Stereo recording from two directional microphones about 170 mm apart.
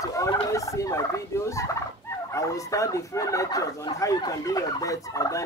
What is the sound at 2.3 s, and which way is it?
Speech, 20° left (ahead or behind).